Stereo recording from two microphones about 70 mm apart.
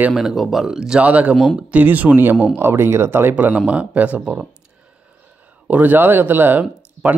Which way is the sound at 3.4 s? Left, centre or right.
Centre.